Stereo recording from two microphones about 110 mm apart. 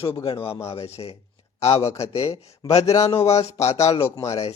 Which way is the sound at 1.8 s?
25° left (ahead or behind).